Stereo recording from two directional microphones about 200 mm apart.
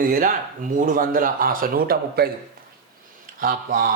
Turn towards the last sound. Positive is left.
turn(degrees=-45)  # may be behind; listen again after turning